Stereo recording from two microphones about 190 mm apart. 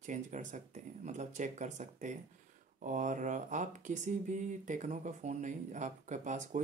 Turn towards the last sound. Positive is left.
turn(degrees=-40)  # may be behind; listen again after turning